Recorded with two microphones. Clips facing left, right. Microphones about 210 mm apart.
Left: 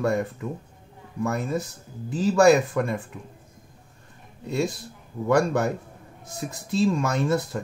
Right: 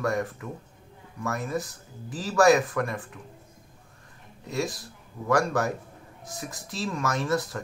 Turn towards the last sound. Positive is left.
turn(degrees=25)  # may be behind; listen again after turning